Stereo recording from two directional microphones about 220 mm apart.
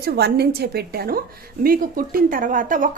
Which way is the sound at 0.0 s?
45° right (ahead or behind).